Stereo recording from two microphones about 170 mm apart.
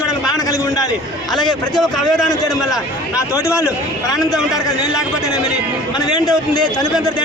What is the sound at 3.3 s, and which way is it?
A man's voice, 15° left (ahead or behind).